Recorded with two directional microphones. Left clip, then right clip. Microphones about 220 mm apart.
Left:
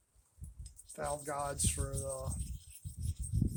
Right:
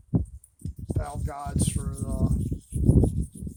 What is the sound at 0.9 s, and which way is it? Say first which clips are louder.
Speech: even; 30° right (ahead or behind).